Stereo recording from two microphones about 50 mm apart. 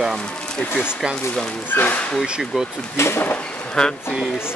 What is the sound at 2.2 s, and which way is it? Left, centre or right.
Speech, centre.